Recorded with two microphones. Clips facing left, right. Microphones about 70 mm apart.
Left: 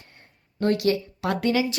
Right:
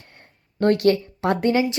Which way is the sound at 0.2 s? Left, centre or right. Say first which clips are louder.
Right 5 dB; right.